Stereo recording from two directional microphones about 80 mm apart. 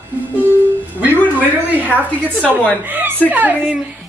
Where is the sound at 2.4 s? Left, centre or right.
Centre.